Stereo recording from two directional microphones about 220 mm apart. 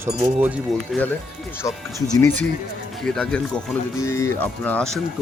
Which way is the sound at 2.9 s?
Centre (ahead or behind).